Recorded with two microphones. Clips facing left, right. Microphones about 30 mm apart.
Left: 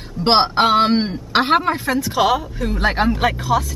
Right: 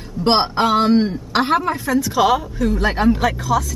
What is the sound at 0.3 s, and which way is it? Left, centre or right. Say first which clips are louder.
A man's voice: left 2 dB; left.